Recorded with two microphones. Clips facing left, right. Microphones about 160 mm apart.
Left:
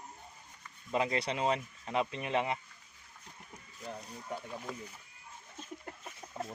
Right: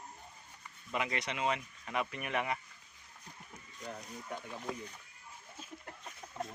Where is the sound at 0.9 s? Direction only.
30° left (ahead or behind).